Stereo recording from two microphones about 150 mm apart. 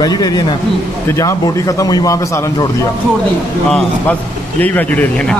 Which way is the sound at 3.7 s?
5° left (ahead or behind).